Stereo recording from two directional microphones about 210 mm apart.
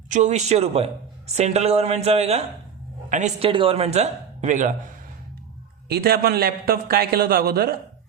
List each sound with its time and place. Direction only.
0.1 s a man's voice: 35° right (ahead or behind)
5.9 s a man's voice: 45° right (ahead or behind)